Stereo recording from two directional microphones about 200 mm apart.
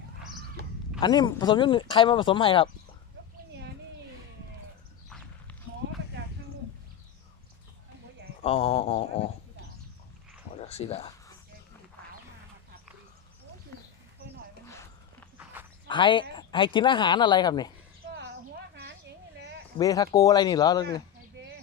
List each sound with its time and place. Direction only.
0.9 s speech: 20° left (ahead or behind)
8.4 s speech: 30° left (ahead or behind)
10.5 s speech: 30° left (ahead or behind)
15.9 s speech: 25° left (ahead or behind)
19.8 s speech: 15° left (ahead or behind)